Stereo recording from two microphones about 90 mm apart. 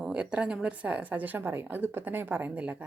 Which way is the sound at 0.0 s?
10° right (ahead or behind).